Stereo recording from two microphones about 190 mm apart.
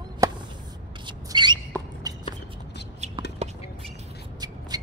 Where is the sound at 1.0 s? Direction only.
25° right (ahead or behind).